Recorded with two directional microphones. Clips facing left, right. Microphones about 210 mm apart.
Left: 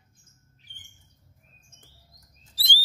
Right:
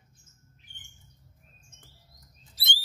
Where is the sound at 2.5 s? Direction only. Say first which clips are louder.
Left 2 dB; 35° left (ahead or behind).